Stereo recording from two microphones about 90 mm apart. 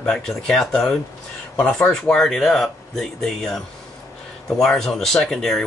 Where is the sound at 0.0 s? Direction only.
5° left (ahead or behind).